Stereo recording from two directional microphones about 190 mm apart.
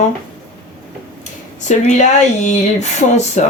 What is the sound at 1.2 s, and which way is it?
A woman's voice, 40° left (ahead or behind).